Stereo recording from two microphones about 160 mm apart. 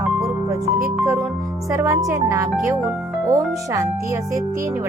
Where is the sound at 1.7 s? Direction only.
20° right (ahead or behind).